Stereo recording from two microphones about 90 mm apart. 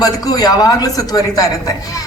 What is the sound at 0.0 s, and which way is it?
A man's voice, 45° left (ahead or behind).